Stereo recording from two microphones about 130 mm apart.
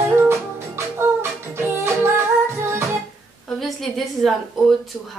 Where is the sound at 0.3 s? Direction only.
20° right (ahead or behind).